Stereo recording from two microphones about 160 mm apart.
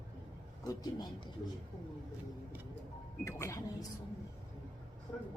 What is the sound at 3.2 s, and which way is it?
Speech, 20° left (ahead or behind).